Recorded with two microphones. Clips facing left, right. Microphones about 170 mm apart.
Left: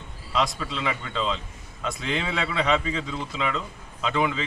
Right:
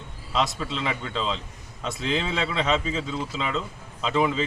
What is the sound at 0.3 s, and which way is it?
Speech, centre (ahead or behind).